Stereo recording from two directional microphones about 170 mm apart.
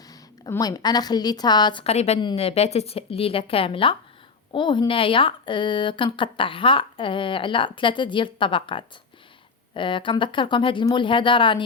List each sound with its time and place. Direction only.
0.1 s a woman's voice: 20° left (ahead or behind)